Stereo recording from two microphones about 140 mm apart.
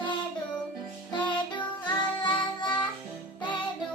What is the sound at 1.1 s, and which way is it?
Music, 35° left (ahead or behind).